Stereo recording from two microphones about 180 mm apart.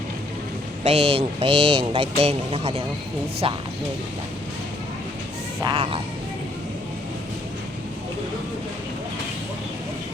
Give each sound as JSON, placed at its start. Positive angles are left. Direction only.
{"t": 0.9, "sound": "speech", "side_deg": -35}
{"t": 5.6, "sound": "speech", "side_deg": -30}